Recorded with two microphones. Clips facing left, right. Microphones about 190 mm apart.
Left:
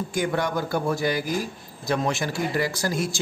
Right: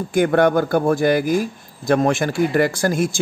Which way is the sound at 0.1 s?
60° right (ahead or behind).